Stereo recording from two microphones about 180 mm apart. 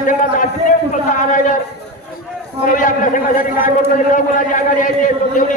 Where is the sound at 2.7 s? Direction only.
45° left (ahead or behind).